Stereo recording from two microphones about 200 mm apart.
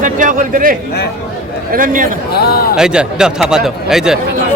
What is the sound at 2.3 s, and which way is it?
Speech, 50° left (ahead or behind).